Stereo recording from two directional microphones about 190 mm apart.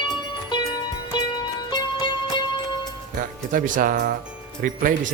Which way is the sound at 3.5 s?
45° right (ahead or behind).